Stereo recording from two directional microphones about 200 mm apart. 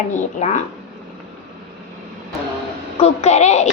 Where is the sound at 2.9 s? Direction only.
30° left (ahead or behind).